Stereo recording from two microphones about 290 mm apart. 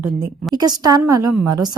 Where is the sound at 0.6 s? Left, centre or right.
Centre.